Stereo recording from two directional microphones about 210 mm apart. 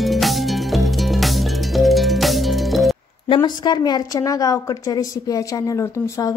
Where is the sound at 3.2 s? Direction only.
20° left (ahead or behind).